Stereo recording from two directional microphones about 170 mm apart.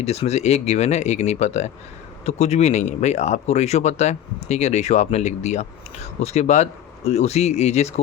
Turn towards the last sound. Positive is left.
turn(degrees=40)  # may be behind; listen again after turning